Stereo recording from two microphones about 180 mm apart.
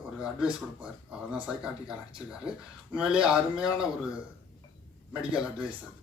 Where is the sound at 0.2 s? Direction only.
5° right (ahead or behind).